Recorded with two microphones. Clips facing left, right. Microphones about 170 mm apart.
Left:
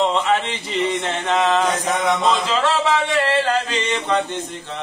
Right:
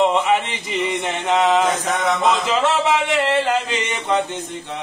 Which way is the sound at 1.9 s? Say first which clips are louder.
Left 1 dB; centre (ahead or behind).